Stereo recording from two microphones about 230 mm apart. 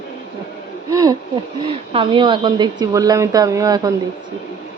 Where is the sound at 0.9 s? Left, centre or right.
Centre.